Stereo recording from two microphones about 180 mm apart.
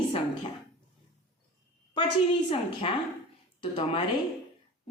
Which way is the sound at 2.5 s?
30° left (ahead or behind).